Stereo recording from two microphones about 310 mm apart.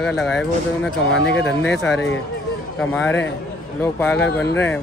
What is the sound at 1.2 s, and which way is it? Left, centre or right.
Speech, left.